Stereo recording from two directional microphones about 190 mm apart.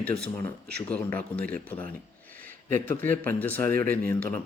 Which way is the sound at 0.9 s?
10° left (ahead or behind).